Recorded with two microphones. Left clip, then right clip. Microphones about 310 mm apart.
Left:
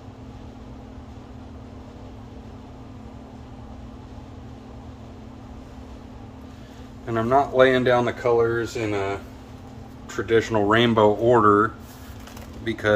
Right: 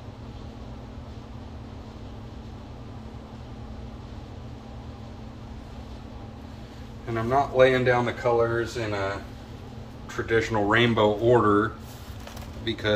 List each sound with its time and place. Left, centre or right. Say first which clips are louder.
7.1 s speech: left 4 dB; centre
10.1 s speech: left 4 dB; left
12.6 s speech: left 4 dB; centre